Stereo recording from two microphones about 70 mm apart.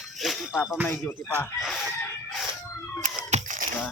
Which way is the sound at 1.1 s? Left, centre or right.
Left.